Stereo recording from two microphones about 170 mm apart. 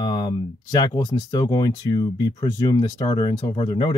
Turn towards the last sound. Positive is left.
turn(degrees=30)  # may be behind; listen again after turning